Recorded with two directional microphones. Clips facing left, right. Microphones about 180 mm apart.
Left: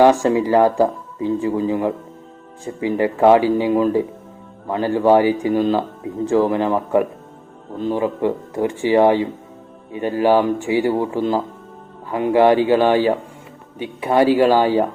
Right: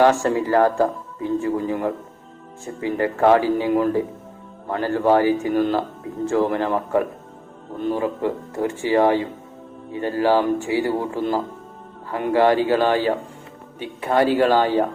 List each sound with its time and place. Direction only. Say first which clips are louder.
0.0 s speech: left 3 dB; 15° left (ahead or behind)